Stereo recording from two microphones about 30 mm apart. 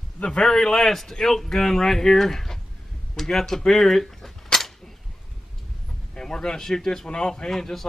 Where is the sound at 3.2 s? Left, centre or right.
Centre.